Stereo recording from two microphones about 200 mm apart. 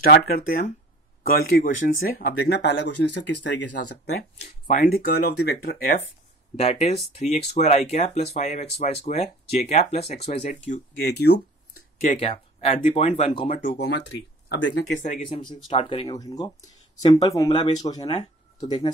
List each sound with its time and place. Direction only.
0.0 s speech: 50° left (ahead or behind)
1.6 s speech: 45° left (ahead or behind); by 4.1 s 60° left (ahead or behind)
4.4 s speech: 45° left (ahead or behind)
6.5 s speech: 30° left (ahead or behind)
13.6 s speech: 40° left (ahead or behind)
14.5 s speech: 60° left (ahead or behind)
15.0 s speech: 40° left (ahead or behind)
15.2 s speech: 25° left (ahead or behind)